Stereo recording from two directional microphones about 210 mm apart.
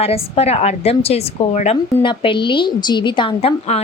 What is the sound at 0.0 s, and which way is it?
A woman's voice, 30° left (ahead or behind).